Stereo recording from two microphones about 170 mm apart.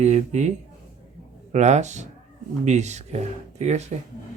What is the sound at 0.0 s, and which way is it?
Speech, 40° right (ahead or behind).